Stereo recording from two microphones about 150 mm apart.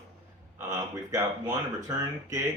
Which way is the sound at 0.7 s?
25° right (ahead or behind).